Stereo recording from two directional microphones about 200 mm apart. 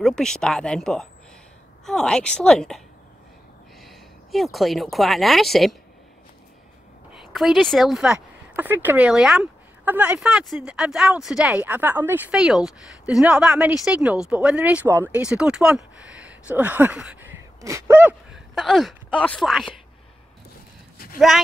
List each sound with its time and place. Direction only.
0.0 s speech: 5° left (ahead or behind)
3.8 s a sound: centre (ahead or behind)
4.9 s speech: centre (ahead or behind)
7.3 s speech: centre (ahead or behind)
17.6 s gasp: 15° right (ahead or behind)
18.5 s speech: centre (ahead or behind)
21.0 s a sound: 50° left (ahead or behind)